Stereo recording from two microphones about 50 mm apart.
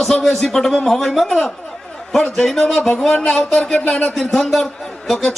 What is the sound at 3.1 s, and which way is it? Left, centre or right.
A man's voice, left.